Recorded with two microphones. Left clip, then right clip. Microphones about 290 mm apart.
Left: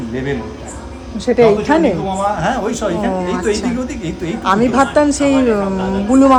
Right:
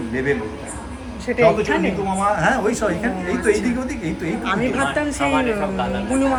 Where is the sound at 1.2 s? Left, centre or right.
Centre.